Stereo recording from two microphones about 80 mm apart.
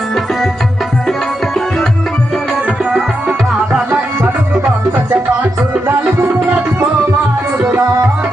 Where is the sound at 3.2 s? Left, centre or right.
Centre.